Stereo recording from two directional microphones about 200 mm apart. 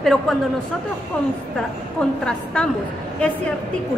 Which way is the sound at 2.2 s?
5° left (ahead or behind).